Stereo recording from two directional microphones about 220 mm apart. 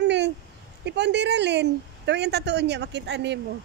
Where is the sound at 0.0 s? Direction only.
50° right (ahead or behind).